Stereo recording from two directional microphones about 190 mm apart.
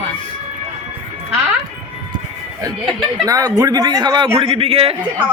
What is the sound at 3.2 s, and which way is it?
A man's voice, 20° right (ahead or behind).